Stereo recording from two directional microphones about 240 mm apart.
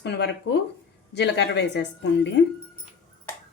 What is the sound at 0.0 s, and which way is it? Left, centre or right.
A woman's voice, left.